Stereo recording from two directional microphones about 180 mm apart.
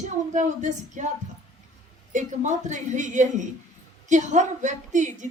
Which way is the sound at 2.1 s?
45° right (ahead or behind).